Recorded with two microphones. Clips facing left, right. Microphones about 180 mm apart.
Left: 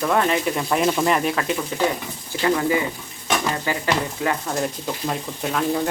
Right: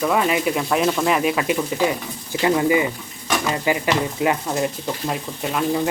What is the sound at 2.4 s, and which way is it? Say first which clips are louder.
Cutlery: right 2 dB; 15° right (ahead or behind).